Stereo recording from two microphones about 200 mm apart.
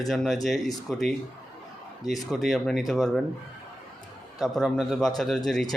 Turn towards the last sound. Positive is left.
turn(degrees=0)  # may be behind; listen again after turning